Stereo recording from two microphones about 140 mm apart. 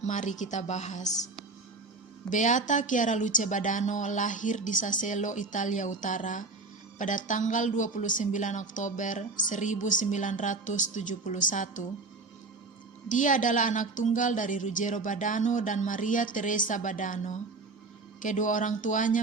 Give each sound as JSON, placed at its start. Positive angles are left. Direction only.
{"t": 0.0, "sound": "speech", "side_deg": 60}
{"t": 2.3, "sound": "speech", "side_deg": 65}
{"t": 13.1, "sound": "speech", "side_deg": 65}